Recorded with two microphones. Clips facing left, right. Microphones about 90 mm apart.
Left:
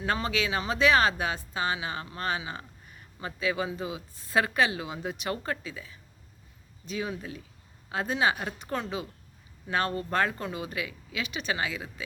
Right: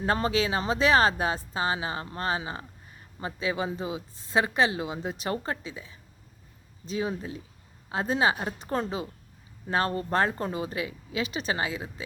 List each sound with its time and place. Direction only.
0.0 s a woman's voice: 35° right (ahead or behind)